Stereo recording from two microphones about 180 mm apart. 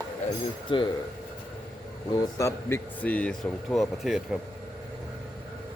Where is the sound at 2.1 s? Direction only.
20° left (ahead or behind); by 4.2 s centre (ahead or behind).